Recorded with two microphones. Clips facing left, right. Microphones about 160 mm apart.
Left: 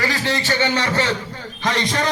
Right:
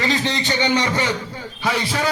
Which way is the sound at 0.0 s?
20° right (ahead or behind).